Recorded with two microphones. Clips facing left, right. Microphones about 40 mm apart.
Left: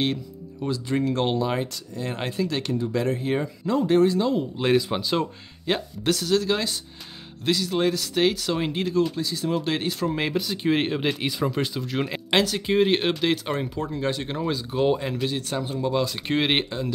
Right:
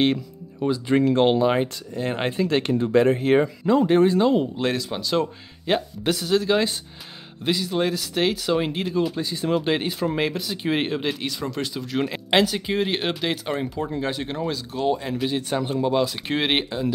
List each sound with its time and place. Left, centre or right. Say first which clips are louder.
0.0 s music: right 5 dB; right
0.9 s speech: right 6 dB; right
4.6 s speech: left 3 dB; centre
9.2 s speech: right 2 dB; right
9.6 s speech: right 2 dB; centre
11.0 s speech: left 2 dB; centre
15.2 s speech: right 3 dB; centre